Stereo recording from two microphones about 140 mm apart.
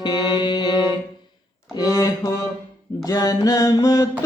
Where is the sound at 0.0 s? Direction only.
30° left (ahead or behind).